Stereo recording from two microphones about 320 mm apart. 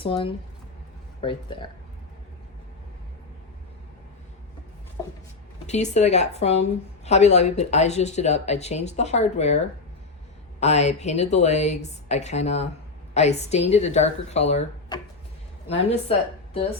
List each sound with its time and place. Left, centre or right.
0.0 s speech: centre
5.6 s speech: left
10.6 s speech: left